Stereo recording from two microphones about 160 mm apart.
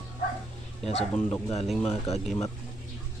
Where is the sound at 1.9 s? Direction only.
40° left (ahead or behind).